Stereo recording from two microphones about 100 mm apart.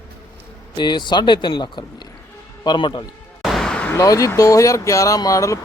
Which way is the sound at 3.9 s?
35° left (ahead or behind).